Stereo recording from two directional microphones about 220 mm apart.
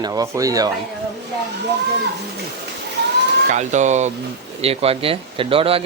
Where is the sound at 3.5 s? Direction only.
35° right (ahead or behind).